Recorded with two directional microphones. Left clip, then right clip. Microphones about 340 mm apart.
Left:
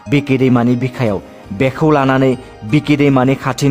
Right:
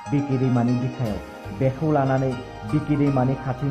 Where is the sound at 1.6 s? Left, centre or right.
Left.